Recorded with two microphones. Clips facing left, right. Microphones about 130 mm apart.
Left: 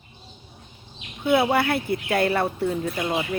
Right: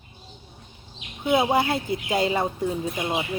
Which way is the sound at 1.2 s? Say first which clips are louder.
Left 1 dB; 20° right (ahead or behind).